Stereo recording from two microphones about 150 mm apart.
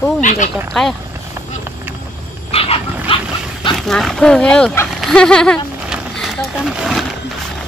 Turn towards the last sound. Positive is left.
turn(degrees=0)  # may be behind; listen again after turning